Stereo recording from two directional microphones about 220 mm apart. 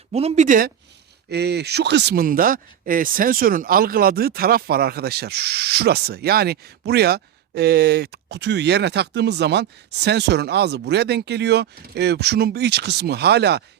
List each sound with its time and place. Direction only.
0.1 s speech: 30° right (ahead or behind)
1.3 s speech: 50° right (ahead or behind)